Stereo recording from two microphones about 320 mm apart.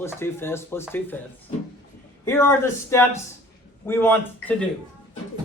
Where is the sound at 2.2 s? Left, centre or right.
Centre.